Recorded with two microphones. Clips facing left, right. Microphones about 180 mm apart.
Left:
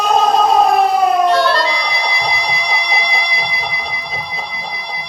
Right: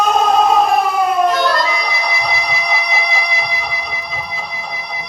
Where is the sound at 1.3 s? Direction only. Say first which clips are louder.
Left 2 dB; 30° left (ahead or behind).